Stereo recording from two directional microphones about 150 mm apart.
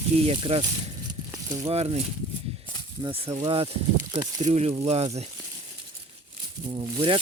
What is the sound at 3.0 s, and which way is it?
Speech, 30° right (ahead or behind).